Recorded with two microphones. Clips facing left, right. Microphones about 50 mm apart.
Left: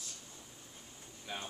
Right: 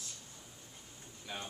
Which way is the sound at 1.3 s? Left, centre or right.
Centre.